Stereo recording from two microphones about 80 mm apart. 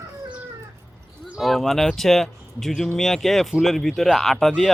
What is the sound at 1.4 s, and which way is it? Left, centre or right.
Speech, centre.